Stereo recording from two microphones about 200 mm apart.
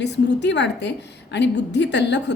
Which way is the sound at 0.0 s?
60° left (ahead or behind).